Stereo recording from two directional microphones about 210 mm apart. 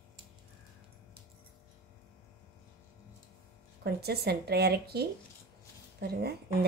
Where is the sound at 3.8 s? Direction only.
50° right (ahead or behind).